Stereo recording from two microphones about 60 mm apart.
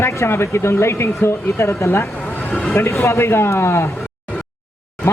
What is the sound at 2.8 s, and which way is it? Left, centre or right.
Speech, left.